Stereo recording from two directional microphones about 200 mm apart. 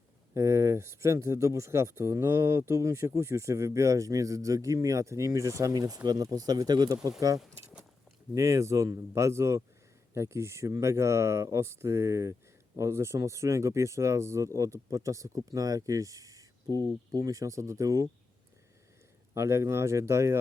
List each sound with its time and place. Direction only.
0.3 s speech: 15° right (ahead or behind)
7.5 s a sound: 10° right (ahead or behind)
8.4 s speech: 15° right (ahead or behind)
19.3 s speech: 15° right (ahead or behind)